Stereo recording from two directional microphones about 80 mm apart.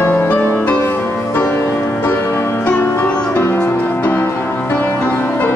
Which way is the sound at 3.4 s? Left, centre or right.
Left.